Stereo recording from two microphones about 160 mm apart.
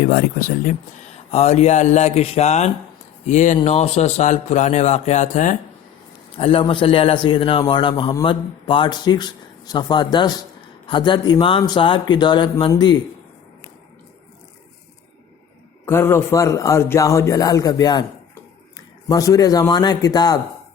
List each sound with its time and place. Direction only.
0.0 s speech: 70° left (ahead or behind)
1.1 s a man's voice: 40° left (ahead or behind)
6.3 s a man's voice: 35° left (ahead or behind)
15.9 s speech: 15° left (ahead or behind)
19.0 s speech: 20° left (ahead or behind)